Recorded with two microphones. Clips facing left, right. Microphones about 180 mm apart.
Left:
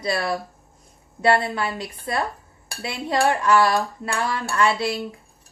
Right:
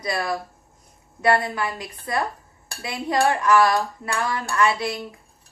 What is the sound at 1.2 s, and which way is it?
Speech, 25° left (ahead or behind).